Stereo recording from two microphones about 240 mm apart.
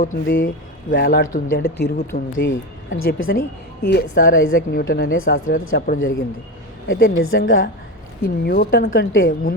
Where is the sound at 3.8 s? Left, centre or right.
Left.